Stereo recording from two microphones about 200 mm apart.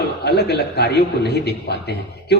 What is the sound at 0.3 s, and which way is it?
A man's voice, 55° left (ahead or behind).